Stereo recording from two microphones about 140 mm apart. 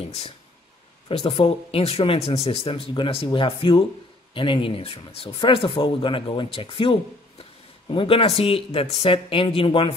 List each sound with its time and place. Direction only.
1.0 s speech: 45° left (ahead or behind)